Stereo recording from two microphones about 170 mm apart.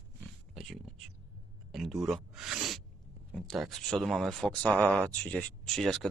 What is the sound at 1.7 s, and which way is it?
Zipper, centre (ahead or behind).